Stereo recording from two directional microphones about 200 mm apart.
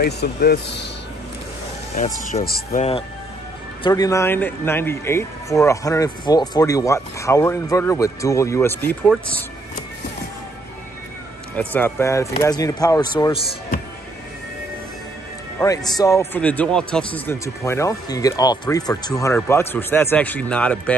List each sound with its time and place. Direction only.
0.0 s speech: 50° left (ahead or behind)
2.4 s speech: 50° left (ahead or behind)
3.8 s speech: 20° left (ahead or behind)
11.5 s speech: 10° left (ahead or behind)
15.6 s speech: 15° left (ahead or behind)